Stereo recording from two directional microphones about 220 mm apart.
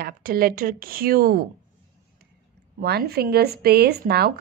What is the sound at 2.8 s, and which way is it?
A woman's voice, 45° right (ahead or behind).